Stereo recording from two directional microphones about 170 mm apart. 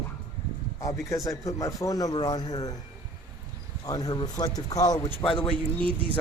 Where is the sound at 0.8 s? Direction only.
20° left (ahead or behind).